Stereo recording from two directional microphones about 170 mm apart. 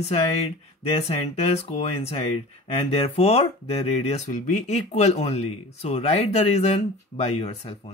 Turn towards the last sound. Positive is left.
turn(degrees=35)  # may be behind; listen again after turning